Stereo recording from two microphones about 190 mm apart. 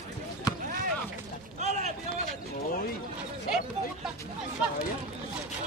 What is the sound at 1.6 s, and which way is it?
Run, 35° right (ahead or behind).